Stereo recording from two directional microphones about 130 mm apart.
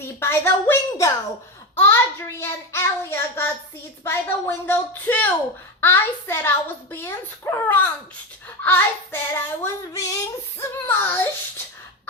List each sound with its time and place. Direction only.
0.2 s child singing: 20° left (ahead or behind)